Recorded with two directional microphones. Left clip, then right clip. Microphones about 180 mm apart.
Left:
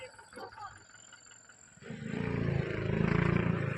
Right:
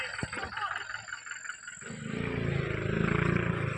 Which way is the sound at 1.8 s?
45° right (ahead or behind).